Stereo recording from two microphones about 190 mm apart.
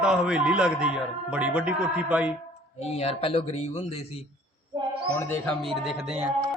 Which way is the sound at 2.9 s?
30° left (ahead or behind).